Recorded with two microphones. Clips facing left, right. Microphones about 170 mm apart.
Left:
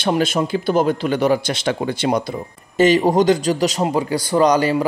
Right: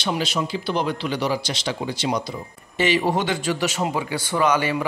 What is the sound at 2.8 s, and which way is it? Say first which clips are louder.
Speech: left 7 dB; 40° left (ahead or behind).